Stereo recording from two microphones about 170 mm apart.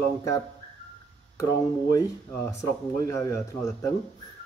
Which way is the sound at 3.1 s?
20° left (ahead or behind).